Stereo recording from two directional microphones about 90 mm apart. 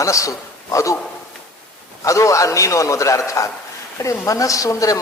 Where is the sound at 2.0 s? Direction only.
35° left (ahead or behind).